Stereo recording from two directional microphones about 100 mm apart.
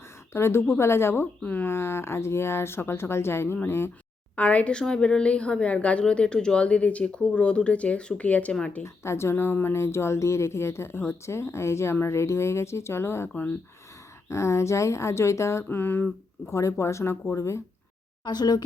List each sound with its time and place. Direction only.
0.3 s speech: 25° left (ahead or behind)
4.4 s a woman's voice: 15° left (ahead or behind)
8.8 s speech: 25° left (ahead or behind)
14.3 s speech: 30° left (ahead or behind)
16.5 s speech: 30° left (ahead or behind)
18.3 s speech: 45° left (ahead or behind)